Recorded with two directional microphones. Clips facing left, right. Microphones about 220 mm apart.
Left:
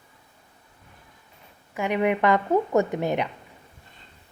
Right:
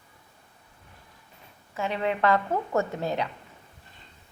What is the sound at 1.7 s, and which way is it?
Speech, 15° left (ahead or behind).